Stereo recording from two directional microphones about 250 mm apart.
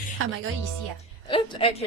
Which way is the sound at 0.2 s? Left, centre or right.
Right.